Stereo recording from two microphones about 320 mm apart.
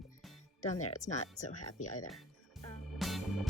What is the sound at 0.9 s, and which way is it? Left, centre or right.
Speech, left.